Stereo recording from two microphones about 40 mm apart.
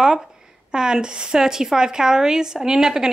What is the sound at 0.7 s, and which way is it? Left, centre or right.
A woman's voice, centre.